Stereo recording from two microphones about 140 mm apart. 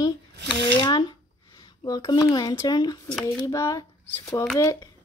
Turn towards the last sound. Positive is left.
turn(degrees=20)  # may be behind; listen again after turning